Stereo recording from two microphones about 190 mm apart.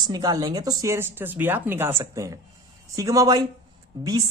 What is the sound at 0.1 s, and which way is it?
Speech, 20° right (ahead or behind).